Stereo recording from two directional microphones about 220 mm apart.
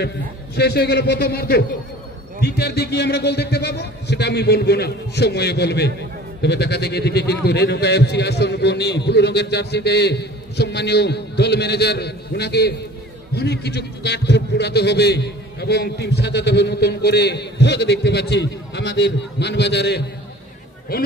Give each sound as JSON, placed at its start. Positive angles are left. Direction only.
{"t": 0.6, "sound": "a man's voice", "side_deg": 45}